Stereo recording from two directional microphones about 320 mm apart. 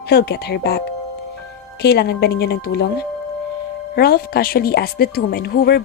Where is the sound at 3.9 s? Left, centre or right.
Left.